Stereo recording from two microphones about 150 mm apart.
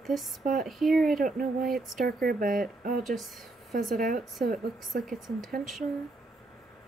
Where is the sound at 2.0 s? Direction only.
85° right.